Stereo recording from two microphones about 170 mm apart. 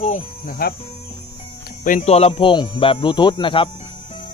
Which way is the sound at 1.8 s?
45° left (ahead or behind).